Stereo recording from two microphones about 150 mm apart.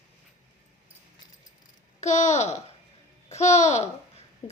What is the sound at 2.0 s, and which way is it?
A woman's voice, 50° left (ahead or behind).